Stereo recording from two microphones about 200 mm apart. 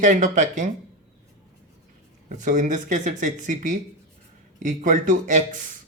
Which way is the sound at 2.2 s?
40° right (ahead or behind).